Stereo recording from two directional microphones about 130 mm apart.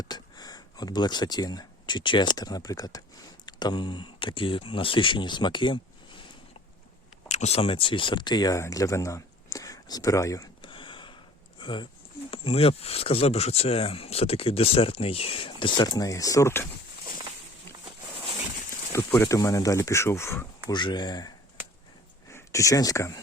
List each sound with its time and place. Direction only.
0.0 s speech: 30° left (ahead or behind)
7.3 s speech: 60° left (ahead or behind); by 10.5 s 25° left (ahead or behind)
10.6 s a sound: 40° left (ahead or behind)
11.6 s speech: 40° left (ahead or behind); by 16.6 s 20° left (ahead or behind)
18.9 s speech: 20° left (ahead or behind)
20.7 s speech: 35° left (ahead or behind)
22.3 s speech: 20° left (ahead or behind)